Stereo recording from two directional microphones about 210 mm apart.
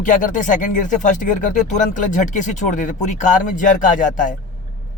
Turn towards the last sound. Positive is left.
turn(degrees=40)  # may be behind; listen again after turning